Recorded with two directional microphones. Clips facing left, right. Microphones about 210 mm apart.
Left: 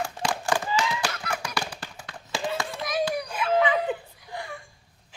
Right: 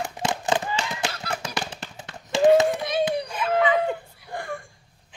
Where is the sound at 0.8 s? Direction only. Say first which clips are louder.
Left 2 dB; 25° right (ahead or behind).